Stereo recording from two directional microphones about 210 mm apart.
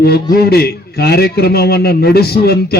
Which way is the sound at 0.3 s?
50° left (ahead or behind).